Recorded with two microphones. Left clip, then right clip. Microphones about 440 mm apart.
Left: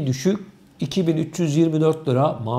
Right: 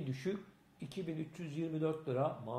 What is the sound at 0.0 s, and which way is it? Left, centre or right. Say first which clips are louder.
Speech: left 17 dB; left.